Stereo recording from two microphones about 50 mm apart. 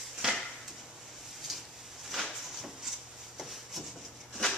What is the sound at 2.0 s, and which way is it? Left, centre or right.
Drawer open or close, centre.